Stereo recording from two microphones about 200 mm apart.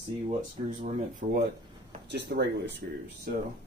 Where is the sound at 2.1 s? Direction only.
60° right (ahead or behind).